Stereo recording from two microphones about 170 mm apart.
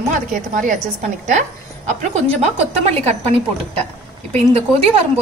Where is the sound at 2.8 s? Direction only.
40° right (ahead or behind).